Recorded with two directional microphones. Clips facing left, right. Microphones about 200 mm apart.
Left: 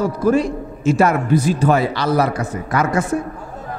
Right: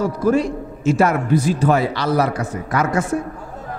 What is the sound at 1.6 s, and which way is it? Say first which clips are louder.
A man's voice: left 1 dB; 20° left (ahead or behind).